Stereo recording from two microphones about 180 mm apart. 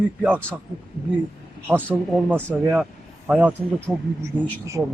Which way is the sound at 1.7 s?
10° right (ahead or behind).